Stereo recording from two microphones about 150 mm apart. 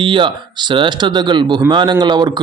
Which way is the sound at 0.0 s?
35° right (ahead or behind).